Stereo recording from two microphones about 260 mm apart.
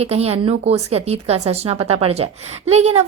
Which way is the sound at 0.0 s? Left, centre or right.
Right.